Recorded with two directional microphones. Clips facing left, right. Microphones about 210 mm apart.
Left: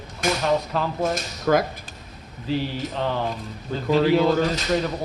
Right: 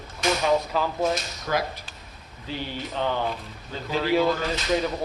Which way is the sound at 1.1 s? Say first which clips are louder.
Left 6 dB; 50° left (ahead or behind).